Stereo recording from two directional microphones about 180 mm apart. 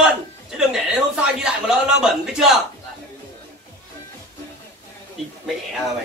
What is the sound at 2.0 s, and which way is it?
Speech, 5° right (ahead or behind).